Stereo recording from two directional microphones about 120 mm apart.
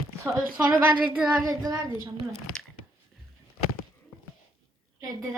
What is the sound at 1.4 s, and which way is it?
Speech, 30° right (ahead or behind).